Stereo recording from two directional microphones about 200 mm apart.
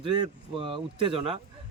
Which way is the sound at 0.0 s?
25° right (ahead or behind).